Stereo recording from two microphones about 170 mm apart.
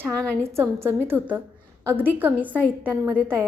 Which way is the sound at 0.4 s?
15° right (ahead or behind).